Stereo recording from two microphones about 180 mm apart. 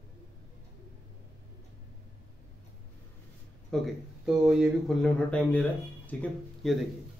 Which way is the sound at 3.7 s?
Centre (ahead or behind).